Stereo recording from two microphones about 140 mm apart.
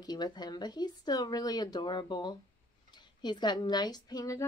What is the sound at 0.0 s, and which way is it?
Speech, 30° left (ahead or behind).